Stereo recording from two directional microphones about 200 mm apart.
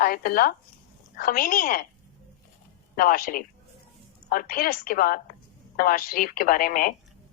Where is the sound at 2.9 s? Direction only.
45° left (ahead or behind).